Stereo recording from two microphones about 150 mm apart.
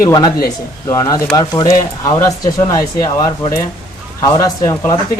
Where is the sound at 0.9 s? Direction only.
25° left (ahead or behind).